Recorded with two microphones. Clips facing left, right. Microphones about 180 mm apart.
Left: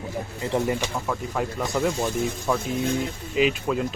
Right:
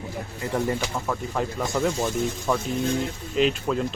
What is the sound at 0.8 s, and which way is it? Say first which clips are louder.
Speech: even; centre (ahead or behind).